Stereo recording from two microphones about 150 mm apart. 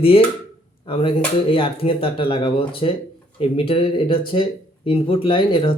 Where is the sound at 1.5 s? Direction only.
35° left (ahead or behind).